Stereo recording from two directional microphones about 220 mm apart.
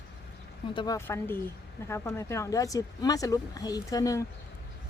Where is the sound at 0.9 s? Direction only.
10° left (ahead or behind).